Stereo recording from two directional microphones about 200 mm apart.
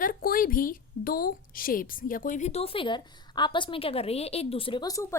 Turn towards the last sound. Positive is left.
turn(degrees=20)  # may be behind; listen again after turning